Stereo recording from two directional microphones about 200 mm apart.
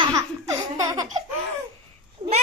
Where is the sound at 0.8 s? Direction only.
15° right (ahead or behind).